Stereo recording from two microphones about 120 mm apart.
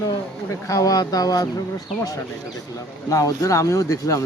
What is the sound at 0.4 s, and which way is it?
Speech, 30° left (ahead or behind).